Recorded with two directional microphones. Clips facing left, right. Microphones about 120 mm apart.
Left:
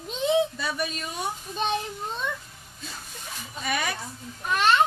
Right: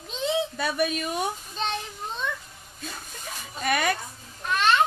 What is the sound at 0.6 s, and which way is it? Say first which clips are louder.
Speech: right 4 dB; 55° right (ahead or behind).